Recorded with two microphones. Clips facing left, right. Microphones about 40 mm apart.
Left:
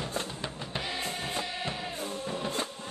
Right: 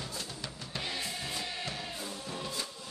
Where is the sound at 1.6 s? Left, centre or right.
Left.